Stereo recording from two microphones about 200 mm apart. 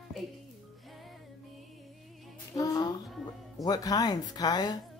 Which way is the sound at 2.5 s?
20° left (ahead or behind).